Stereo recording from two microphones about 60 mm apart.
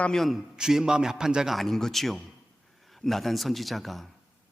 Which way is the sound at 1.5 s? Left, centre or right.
Centre.